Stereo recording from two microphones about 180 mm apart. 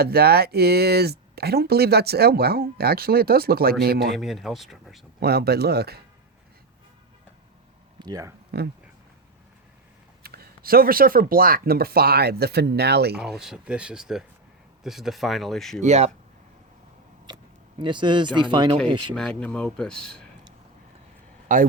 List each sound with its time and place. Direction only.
0.0 s speech: 60° right (ahead or behind)
4.1 s speech: centre (ahead or behind)
5.2 s speech: 60° right (ahead or behind)
7.9 s speech: 20° right (ahead or behind)
8.5 s speech: 65° right (ahead or behind)
10.2 s speech: 55° right (ahead or behind)
13.1 s speech: 5° right (ahead or behind)
15.8 s speech: 40° right (ahead or behind)
17.2 s a sound: 25° right (ahead or behind)
18.3 s speech: 25° right (ahead or behind)
19.1 s speech: 5° left (ahead or behind)
21.4 s a man's voice: 45° right (ahead or behind)